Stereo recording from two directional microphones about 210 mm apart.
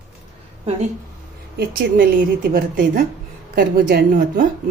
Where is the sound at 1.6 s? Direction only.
45° right (ahead or behind).